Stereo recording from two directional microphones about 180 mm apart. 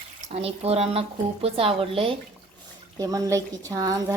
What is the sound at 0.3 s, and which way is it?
Speech, 35° right (ahead or behind).